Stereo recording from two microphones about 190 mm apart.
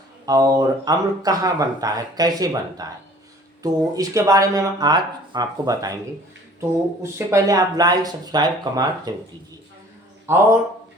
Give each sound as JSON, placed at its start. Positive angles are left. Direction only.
{"t": 0.3, "sound": "speech", "side_deg": -20}